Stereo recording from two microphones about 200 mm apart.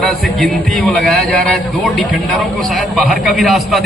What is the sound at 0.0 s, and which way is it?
A man's voice, centre (ahead or behind).